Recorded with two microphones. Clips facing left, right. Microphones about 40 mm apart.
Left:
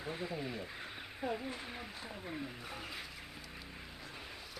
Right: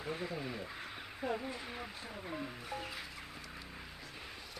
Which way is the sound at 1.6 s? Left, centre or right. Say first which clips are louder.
Right 1 dB; centre.